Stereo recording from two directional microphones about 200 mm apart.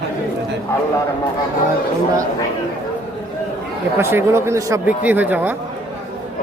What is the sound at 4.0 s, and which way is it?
A man's voice, 10° right (ahead or behind).